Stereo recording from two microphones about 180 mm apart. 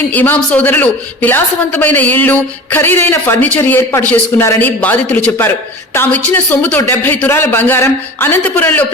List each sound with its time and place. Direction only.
0.1 s a woman's voice: 10° left (ahead or behind)